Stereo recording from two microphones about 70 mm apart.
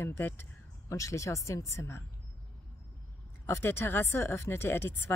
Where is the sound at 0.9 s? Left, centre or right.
Left.